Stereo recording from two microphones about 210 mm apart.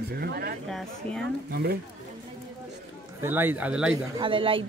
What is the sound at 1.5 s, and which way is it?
Speech, 50° right (ahead or behind).